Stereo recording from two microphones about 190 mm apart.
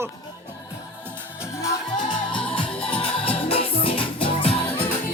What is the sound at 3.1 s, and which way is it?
Music, 30° left (ahead or behind).